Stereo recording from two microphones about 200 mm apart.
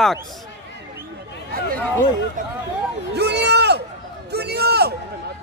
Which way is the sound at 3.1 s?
55° right (ahead or behind).